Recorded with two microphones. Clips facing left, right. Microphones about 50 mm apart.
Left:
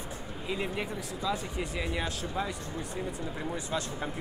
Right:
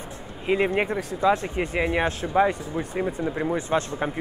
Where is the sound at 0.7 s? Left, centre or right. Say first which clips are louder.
Right 10 dB; right.